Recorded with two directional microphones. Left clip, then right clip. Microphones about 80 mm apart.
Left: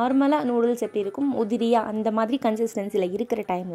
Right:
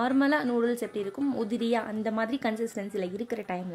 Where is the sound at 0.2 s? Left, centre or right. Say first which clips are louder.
Left 4 dB; left.